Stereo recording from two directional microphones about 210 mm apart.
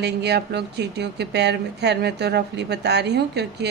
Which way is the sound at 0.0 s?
50° right (ahead or behind).